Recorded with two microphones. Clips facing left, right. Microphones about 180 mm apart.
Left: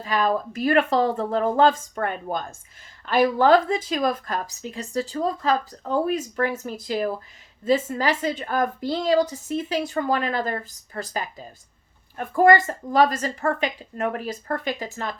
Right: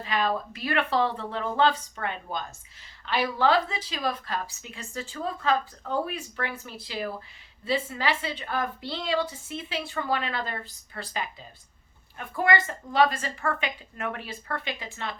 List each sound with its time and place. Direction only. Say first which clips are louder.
0.0 s a woman's voice: left 4 dB; 45° left (ahead or behind)